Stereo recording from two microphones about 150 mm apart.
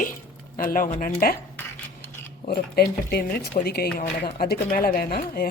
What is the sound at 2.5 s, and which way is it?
Speech, 90° left.